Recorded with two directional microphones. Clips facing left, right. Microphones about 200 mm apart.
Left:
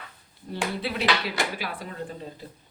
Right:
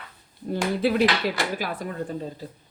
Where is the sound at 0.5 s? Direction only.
45° right (ahead or behind).